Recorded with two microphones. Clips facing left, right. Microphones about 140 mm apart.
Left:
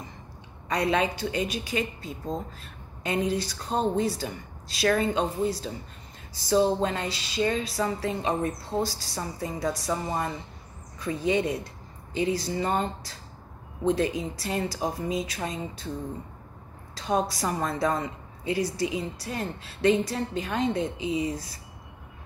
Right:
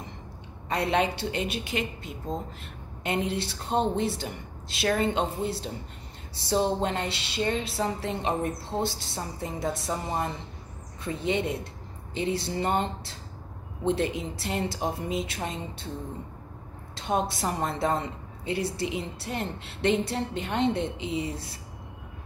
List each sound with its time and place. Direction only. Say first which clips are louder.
0.7 s a woman's voice: even; 30° right (ahead or behind)
3.0 s a woman's voice: left 2 dB; 25° right (ahead or behind)
16.9 s a woman's voice: left 1 dB; 25° right (ahead or behind)